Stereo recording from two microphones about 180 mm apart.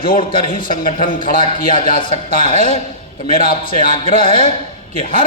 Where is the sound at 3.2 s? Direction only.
55° left (ahead or behind).